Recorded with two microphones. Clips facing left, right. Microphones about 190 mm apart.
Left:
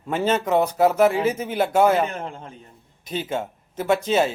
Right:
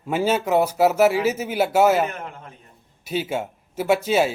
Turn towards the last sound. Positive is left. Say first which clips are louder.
# right 1 dB
turn(degrees=-10)  # may be behind; listen again after turning